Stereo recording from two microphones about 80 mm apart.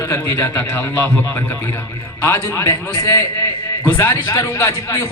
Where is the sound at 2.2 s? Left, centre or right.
Left.